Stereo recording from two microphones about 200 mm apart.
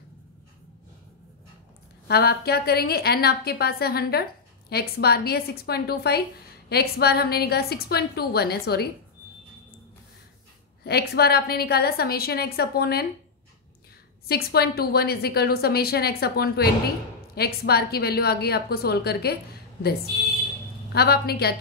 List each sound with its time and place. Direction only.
2.0 s a woman's voice: 50° left (ahead or behind)
10.8 s a woman's voice: 55° left (ahead or behind)
14.2 s a woman's voice: 50° left (ahead or behind)
20.9 s a woman's voice: 50° left (ahead or behind)